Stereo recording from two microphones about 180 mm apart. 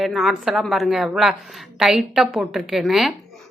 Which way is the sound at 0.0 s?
Centre (ahead or behind).